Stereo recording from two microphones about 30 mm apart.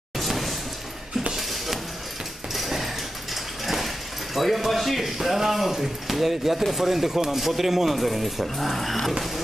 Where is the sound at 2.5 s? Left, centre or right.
Centre.